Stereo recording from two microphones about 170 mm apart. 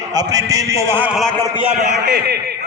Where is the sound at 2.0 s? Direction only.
70° right (ahead or behind).